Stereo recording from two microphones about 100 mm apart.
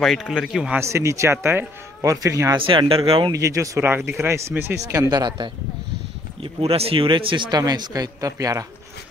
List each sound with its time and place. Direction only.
0.0 s a man's voice: centre (ahead or behind)
0.7 s speech: 30° right (ahead or behind)
2.5 s speech: 55° right (ahead or behind)
3.3 s speech: 35° right (ahead or behind)
5.1 s speech: 45° right (ahead or behind)
6.4 s speech: 75° right (ahead or behind); by 7.4 s 55° right (ahead or behind)
7.5 s speech: 45° right (ahead or behind)